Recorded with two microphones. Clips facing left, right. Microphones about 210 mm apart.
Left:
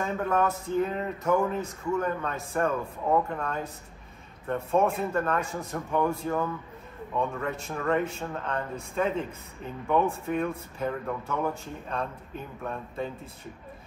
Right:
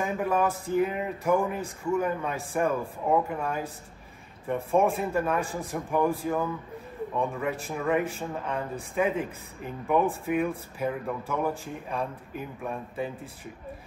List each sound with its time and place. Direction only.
0.0 s speech: 10° right (ahead or behind)
4.6 s speech: 10° right (ahead or behind)
5.4 s a man's voice: 30° right (ahead or behind)
5.7 s speech: 10° right (ahead or behind)
10.2 s speech: 10° right (ahead or behind)